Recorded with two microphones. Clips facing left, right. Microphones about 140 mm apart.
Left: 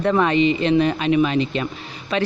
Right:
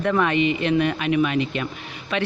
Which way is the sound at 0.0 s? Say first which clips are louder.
Left 3 dB; 30° left (ahead or behind).